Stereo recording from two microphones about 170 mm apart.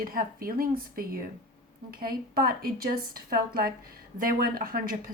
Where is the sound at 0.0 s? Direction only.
60° right (ahead or behind).